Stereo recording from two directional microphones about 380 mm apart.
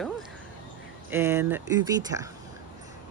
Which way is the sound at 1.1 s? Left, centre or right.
Centre.